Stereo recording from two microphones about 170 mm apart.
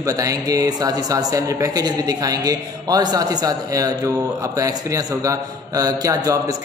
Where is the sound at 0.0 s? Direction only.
20° right (ahead or behind).